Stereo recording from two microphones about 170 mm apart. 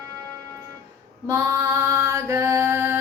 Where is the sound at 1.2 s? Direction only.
15° right (ahead or behind).